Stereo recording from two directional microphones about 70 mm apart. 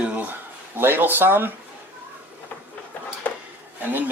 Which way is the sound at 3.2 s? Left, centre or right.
Left.